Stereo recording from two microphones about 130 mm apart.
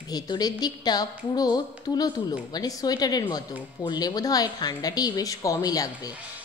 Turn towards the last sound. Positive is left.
turn(degrees=30)  # may be behind; listen again after turning